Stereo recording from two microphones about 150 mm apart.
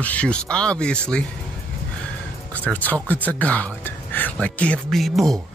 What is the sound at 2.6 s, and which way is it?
A man's voice, 10° left (ahead or behind).